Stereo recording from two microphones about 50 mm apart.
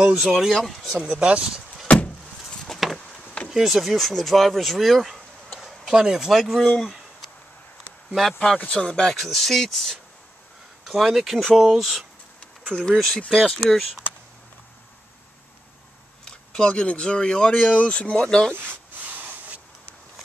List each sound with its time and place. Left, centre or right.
0.2 s speech: centre
1.0 s speech: right
1.9 s vehicle: left
2.5 s a sound: centre
3.4 s speech: centre
5.6 s a sound: centre
5.9 s speech: centre
6.8 s a sound: centre
8.1 s speech: centre
8.5 s speech: left
9.1 s speech: centre
16.3 s speech: centre
18.5 s speech: right
18.9 s a sound: right